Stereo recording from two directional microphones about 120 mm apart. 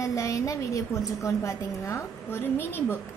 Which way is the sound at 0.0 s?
25° left (ahead or behind).